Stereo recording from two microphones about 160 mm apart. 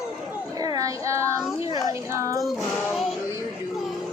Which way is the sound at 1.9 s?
20° right (ahead or behind).